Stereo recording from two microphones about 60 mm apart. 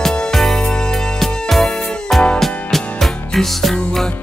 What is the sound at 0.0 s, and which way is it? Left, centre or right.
Music, centre.